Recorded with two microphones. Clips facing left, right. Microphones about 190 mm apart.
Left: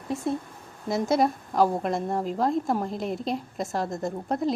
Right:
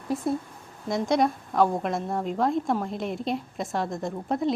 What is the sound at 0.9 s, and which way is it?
A woman's voice, 5° left (ahead or behind).